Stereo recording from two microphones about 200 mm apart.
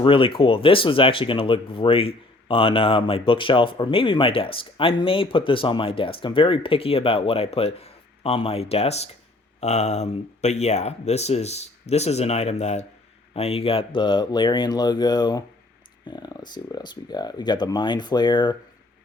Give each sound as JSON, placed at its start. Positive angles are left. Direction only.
{"t": 0.0, "sound": "speech", "side_deg": 25}